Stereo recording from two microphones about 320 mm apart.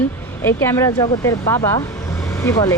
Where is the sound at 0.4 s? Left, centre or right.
Centre.